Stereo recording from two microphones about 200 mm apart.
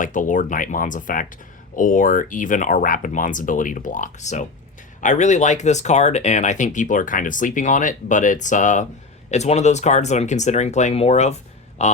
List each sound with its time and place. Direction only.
0.0 s speech: 40° left (ahead or behind)